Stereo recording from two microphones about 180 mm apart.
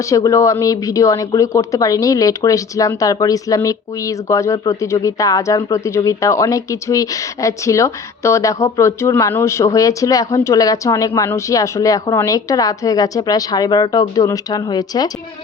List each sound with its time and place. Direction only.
0.0 s speech: 20° left (ahead or behind)